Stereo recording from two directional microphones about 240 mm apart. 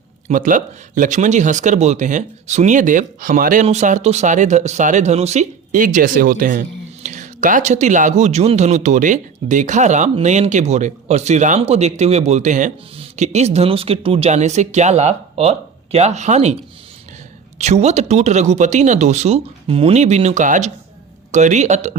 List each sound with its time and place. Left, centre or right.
0.3 s speech: right
17.6 s speech: right